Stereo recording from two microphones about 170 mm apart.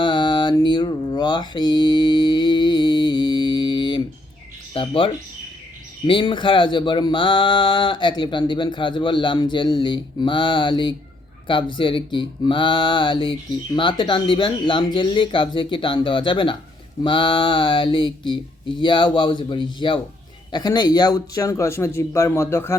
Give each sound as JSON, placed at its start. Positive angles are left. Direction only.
{"t": 0.0, "sound": "mantra", "side_deg": 25}
{"t": 4.7, "sound": "speech", "side_deg": 30}